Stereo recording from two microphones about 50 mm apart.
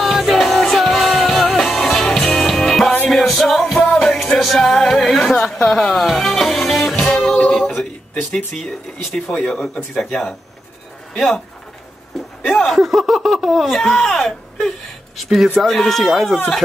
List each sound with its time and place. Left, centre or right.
0.0 s music: centre
4.4 s speech: centre
7.0 s music: centre
7.5 s male singing: centre
8.6 s speech: centre
12.4 s speech: centre
15.2 s speech: centre